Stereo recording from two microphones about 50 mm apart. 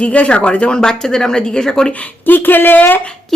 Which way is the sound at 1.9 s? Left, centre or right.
Left.